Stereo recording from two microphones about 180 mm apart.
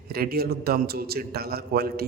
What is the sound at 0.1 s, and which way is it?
Speech, 60° right (ahead or behind).